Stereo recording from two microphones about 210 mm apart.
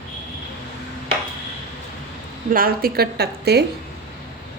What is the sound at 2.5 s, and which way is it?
A woman's voice, 45° right (ahead or behind).